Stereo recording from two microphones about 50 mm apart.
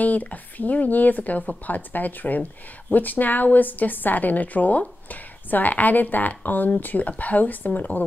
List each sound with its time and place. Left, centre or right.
0.0 s a woman's voice: left